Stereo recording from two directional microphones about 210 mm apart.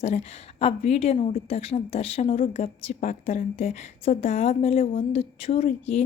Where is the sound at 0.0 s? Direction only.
30° left (ahead or behind).